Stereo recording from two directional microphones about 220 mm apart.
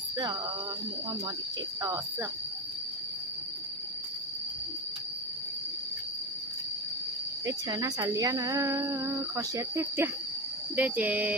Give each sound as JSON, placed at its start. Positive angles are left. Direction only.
{"t": 7.4, "sound": "speech", "side_deg": -15}